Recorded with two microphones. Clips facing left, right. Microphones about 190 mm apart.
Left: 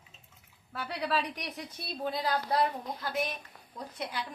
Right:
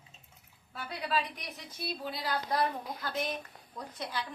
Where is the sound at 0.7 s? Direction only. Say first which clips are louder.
Left 2 dB; 75° left (ahead or behind).